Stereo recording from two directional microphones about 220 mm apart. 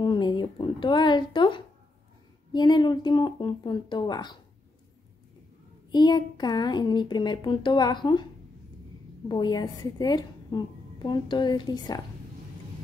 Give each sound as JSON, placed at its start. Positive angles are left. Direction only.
{"t": 0.0, "sound": "a sound", "side_deg": 20}
{"t": 2.5, "sound": "a woman's voice", "side_deg": 20}
{"t": 5.9, "sound": "a woman's voice", "side_deg": 20}
{"t": 9.3, "sound": "a woman's voice", "side_deg": 20}